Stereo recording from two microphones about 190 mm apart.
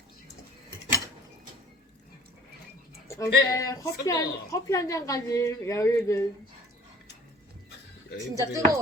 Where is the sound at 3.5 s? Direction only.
15° left (ahead or behind).